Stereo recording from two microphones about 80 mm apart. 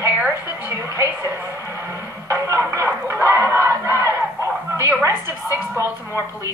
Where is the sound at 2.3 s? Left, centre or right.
Right.